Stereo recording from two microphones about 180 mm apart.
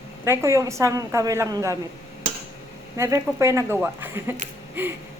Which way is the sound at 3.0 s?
15° right (ahead or behind).